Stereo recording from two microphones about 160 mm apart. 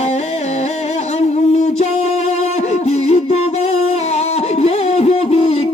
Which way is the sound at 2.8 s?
40° left (ahead or behind).